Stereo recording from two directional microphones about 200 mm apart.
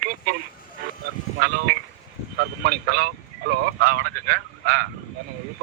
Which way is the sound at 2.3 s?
50° right (ahead or behind).